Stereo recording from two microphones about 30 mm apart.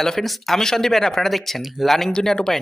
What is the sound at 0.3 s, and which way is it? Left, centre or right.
Speech, centre.